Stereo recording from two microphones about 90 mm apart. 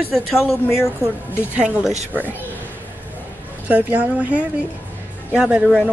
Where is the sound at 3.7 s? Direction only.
15° right (ahead or behind).